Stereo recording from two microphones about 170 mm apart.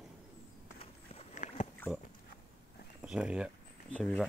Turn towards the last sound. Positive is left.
turn(degrees=5)  # may be behind; listen again after turning